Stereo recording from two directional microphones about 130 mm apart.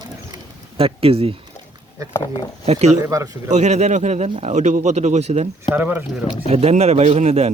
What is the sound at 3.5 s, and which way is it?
Speech, 60° right (ahead or behind).